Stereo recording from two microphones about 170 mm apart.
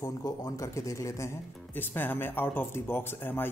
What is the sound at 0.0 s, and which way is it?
A man's voice, 20° left (ahead or behind).